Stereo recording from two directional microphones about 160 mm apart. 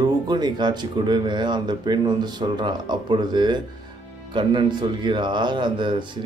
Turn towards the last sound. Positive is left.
turn(degrees=-30)  # may be behind; listen again after turning